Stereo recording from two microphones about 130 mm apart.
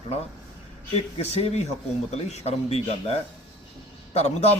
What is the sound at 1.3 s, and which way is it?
A man's voice, 55° left (ahead or behind).